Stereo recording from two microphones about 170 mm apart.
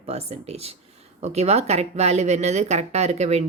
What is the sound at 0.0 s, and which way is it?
Speech, 40° right (ahead or behind).